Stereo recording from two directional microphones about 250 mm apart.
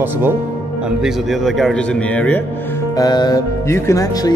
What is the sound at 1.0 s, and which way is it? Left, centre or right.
Speech, centre.